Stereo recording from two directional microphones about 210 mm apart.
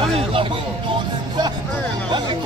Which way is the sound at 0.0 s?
25° right (ahead or behind).